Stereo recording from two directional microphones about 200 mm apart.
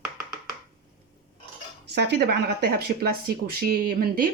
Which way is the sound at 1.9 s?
55° right (ahead or behind).